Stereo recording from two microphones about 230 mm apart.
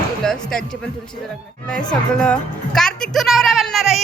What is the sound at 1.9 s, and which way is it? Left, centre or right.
A woman's voice, centre.